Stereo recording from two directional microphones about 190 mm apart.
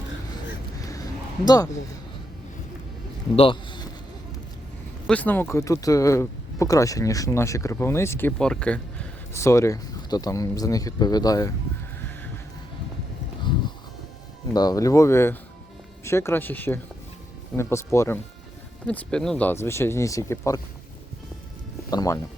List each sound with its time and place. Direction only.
0.8 s a sound: 20° left (ahead or behind)
1.5 s a man's voice: 20° left (ahead or behind)
3.3 s a sound: 25° left (ahead or behind)
5.0 s speech: 10° left (ahead or behind)
14.5 s speech: 20° left (ahead or behind)
21.8 s speech: 20° left (ahead or behind)